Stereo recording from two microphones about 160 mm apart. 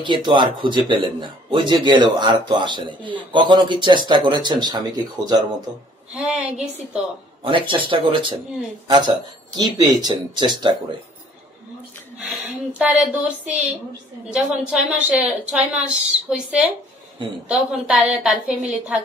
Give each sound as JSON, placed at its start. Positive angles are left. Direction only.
{"t": 0.0, "sound": "speech", "side_deg": -30}
{"t": 6.1, "sound": "speech", "side_deg": 0}
{"t": 7.4, "sound": "speech", "side_deg": -30}
{"t": 12.2, "sound": "a woman's voice", "side_deg": -5}